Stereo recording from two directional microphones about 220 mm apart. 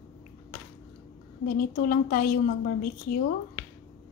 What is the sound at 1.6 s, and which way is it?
Speech, 40° left (ahead or behind).